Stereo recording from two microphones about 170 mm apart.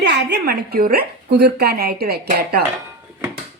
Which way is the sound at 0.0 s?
90° right.